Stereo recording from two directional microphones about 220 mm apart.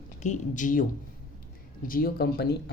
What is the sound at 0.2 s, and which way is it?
Speech, 35° left (ahead or behind).